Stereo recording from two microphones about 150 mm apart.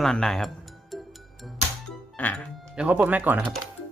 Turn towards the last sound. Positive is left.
turn(degrees=-10)  # may be behind; listen again after turning